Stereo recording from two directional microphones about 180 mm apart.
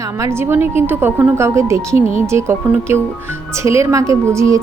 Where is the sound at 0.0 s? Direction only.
15° right (ahead or behind).